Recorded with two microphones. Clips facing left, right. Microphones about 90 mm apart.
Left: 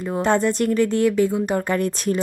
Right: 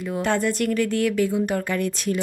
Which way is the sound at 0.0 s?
30° left (ahead or behind).